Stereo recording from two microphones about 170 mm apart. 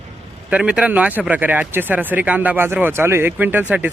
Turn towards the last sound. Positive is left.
turn(degrees=-10)  # may be behind; listen again after turning